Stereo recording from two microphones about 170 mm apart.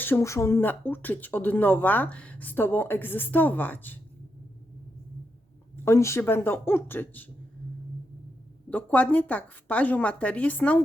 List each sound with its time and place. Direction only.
0.0 s speech: 15° left (ahead or behind)
5.7 s speech: 15° left (ahead or behind)
8.7 s speech: 10° left (ahead or behind)